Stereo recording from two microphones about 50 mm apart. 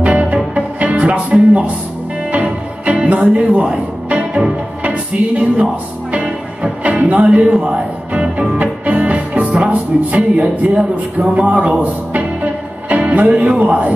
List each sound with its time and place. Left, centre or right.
0.0 s music: right
6.8 s music: right
7.5 s speech: centre
8.1 s music: right
13.4 s a man's voice: right